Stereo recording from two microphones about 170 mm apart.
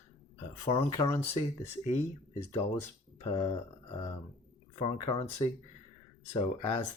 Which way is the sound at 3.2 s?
25° left (ahead or behind).